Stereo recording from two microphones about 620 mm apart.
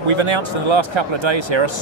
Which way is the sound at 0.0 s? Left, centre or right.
Right.